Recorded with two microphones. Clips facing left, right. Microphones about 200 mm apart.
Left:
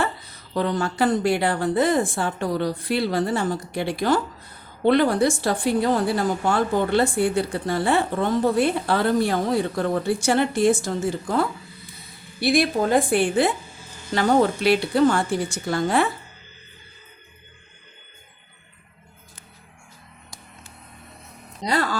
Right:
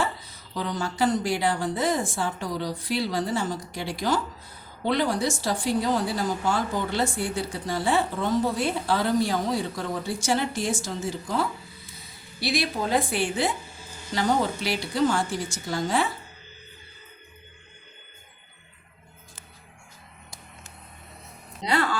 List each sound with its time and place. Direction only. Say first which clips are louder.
0.0 s a woman's voice: left 3 dB; 60° left (ahead or behind)
21.6 s speech: left 2 dB; 40° left (ahead or behind)